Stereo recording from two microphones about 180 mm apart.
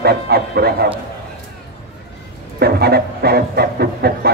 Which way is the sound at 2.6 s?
60° right (ahead or behind).